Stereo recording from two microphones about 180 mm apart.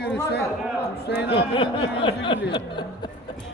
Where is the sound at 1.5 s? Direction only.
30° left (ahead or behind).